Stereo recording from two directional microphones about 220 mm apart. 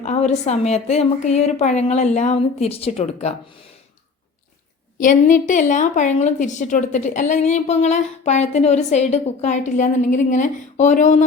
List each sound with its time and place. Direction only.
0.0 s a woman's voice: 30° left (ahead or behind)
4.9 s a woman's voice: 35° left (ahead or behind)